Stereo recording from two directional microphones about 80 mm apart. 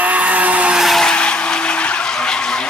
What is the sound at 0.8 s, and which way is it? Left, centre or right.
Vehicle, centre.